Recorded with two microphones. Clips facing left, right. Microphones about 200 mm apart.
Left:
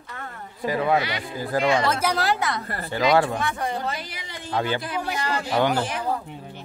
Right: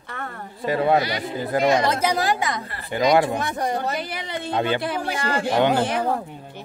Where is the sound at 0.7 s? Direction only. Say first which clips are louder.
Right 3 dB; 30° right (ahead or behind).